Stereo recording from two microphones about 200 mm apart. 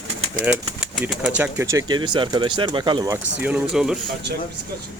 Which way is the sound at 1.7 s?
20° right (ahead or behind).